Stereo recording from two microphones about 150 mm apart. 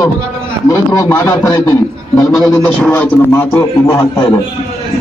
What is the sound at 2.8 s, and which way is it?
A man's voice, 15° left (ahead or behind).